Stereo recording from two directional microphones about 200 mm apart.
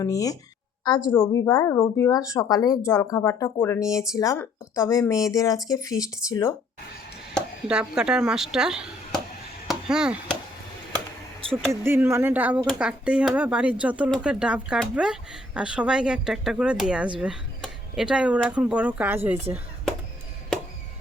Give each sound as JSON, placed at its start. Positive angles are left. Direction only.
{"t": 0.0, "sound": "speech", "side_deg": 15}
{"t": 7.3, "sound": "speech", "side_deg": -5}
{"t": 9.6, "sound": "chop", "side_deg": -5}
{"t": 10.9, "sound": "a sound", "side_deg": -25}
{"t": 11.7, "sound": "speech", "side_deg": -10}